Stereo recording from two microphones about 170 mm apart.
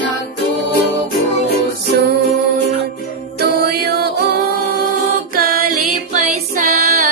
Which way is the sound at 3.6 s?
65° right (ahead or behind).